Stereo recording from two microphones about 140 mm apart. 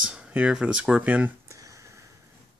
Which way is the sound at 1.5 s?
25° right (ahead or behind).